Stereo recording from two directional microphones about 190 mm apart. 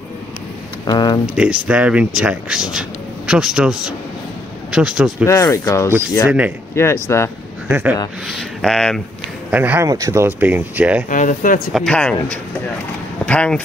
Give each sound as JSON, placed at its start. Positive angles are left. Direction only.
{"t": 0.8, "sound": "speech", "side_deg": 20}
{"t": 1.2, "sound": "speech", "side_deg": -5}
{"t": 5.2, "sound": "speech", "side_deg": 15}
{"t": 6.2, "sound": "speech", "side_deg": -5}
{"t": 6.7, "sound": "speech", "side_deg": 15}
{"t": 7.6, "sound": "speech", "side_deg": -10}
{"t": 9.5, "sound": "speech", "side_deg": -10}
{"t": 11.1, "sound": "speech", "side_deg": 45}
{"t": 11.7, "sound": "speech", "side_deg": 5}